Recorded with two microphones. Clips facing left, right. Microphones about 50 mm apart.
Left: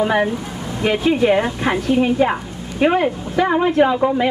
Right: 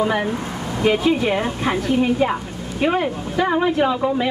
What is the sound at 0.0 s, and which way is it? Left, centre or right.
Speech, left.